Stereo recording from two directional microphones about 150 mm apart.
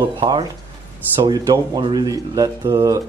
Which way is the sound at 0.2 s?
30° right (ahead or behind).